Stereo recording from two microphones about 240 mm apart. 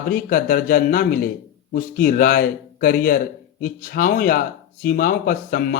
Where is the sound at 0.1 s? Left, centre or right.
Left.